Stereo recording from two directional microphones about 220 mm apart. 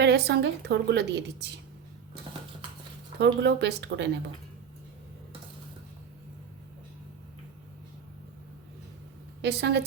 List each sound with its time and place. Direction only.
0.0 s a woman's voice: 50° right (ahead or behind)
3.2 s a woman's voice: 50° right (ahead or behind)
9.4 s a woman's voice: 50° right (ahead or behind)